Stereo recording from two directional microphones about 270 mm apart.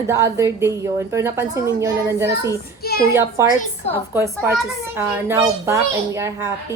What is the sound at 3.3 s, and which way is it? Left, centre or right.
A woman's voice, centre.